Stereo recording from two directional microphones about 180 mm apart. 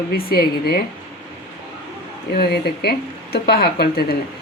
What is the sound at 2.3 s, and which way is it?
Speech, 60° left (ahead or behind).